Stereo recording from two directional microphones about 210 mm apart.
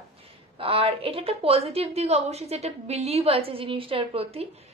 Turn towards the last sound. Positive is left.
turn(degrees=-30)  # may be behind; listen again after turning